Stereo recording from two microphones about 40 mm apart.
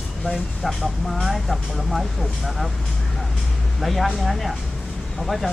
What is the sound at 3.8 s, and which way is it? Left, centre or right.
Speech, centre.